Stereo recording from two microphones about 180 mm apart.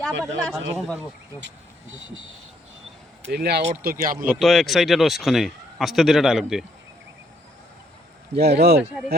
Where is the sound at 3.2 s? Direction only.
65° right (ahead or behind).